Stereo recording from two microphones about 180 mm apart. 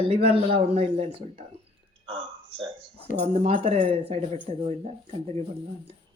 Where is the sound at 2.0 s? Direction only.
30° right (ahead or behind).